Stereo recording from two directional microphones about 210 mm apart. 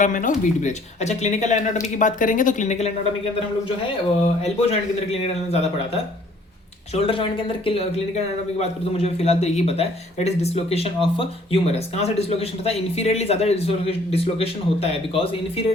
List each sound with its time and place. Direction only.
0.0 s speech: 35° left (ahead or behind)
4.4 s a man's voice: 30° left (ahead or behind)